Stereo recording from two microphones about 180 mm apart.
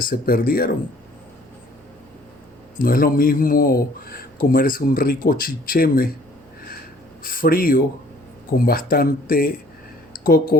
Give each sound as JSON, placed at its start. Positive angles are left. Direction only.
{"t": 0.0, "sound": "a man's voice", "side_deg": 50}
{"t": 2.7, "sound": "a man's voice", "side_deg": 55}
{"t": 7.2, "sound": "a man's voice", "side_deg": 50}
{"t": 10.1, "sound": "a sound", "side_deg": 55}